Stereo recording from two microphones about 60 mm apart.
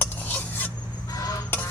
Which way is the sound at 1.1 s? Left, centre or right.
Left.